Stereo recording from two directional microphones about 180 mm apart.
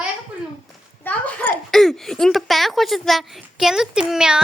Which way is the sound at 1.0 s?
5° left (ahead or behind).